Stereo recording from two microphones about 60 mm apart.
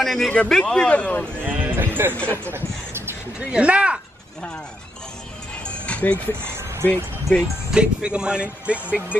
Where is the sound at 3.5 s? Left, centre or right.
Right.